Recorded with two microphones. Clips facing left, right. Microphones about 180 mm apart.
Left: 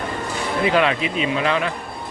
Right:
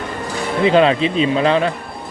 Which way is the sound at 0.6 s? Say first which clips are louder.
Right 6 dB; 30° right (ahead or behind).